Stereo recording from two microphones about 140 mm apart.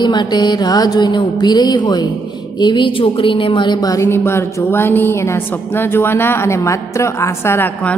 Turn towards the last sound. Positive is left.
turn(degrees=10)  # may be behind; listen again after turning